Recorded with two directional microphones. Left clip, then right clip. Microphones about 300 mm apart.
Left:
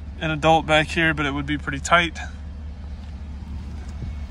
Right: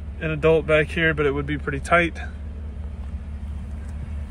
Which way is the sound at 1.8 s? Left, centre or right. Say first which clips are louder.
Left 1 dB; left.